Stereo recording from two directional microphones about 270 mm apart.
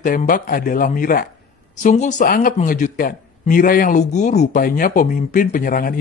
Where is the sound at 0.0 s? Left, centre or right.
Left.